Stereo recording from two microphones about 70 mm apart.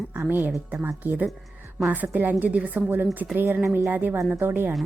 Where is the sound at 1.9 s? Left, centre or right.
Right.